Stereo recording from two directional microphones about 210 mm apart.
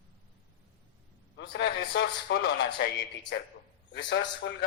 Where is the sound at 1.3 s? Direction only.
55° left (ahead or behind).